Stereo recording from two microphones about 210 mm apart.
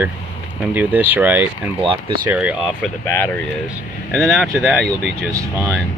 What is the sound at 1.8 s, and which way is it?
Speech, 25° right (ahead or behind).